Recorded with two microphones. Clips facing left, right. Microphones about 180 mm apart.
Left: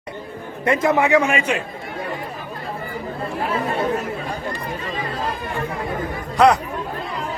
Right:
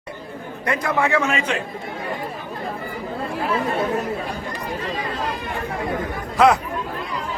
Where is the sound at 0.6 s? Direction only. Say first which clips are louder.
Left 4 dB; 25° left (ahead or behind).